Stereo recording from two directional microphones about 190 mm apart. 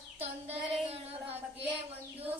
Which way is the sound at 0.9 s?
30° right (ahead or behind).